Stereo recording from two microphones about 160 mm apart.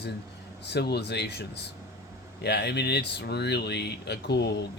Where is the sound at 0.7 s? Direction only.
90° left.